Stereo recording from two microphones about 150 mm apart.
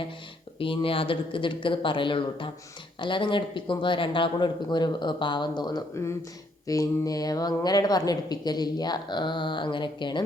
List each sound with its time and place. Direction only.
0.6 s a woman's voice: 35° left (ahead or behind)